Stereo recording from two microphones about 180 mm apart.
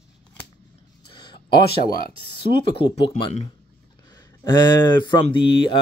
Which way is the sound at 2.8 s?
30° left (ahead or behind).